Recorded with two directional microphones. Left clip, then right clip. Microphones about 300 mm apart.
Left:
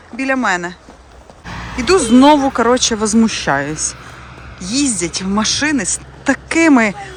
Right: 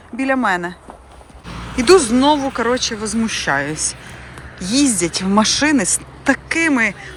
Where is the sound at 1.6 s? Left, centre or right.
Centre.